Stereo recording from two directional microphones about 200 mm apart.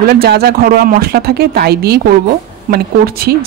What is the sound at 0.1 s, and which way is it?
A woman's voice, 50° right (ahead or behind).